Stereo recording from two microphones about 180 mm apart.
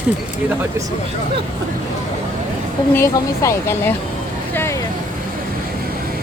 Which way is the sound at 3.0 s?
15° left (ahead or behind).